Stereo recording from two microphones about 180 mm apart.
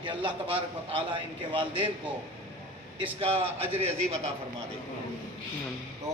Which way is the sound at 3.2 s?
30° right (ahead or behind).